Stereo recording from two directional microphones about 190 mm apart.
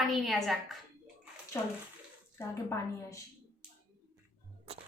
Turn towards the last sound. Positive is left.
turn(degrees=15)  # may be behind; listen again after turning